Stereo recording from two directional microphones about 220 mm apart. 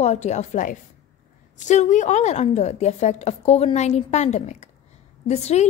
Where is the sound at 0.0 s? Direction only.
30° left (ahead or behind).